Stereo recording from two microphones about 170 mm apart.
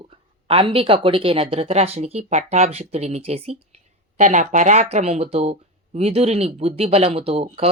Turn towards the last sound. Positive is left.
turn(degrees=-35)  # may be behind; listen again after turning